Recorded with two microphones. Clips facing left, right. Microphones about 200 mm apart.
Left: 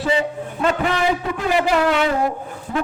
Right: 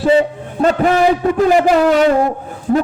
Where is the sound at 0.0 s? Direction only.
35° right (ahead or behind).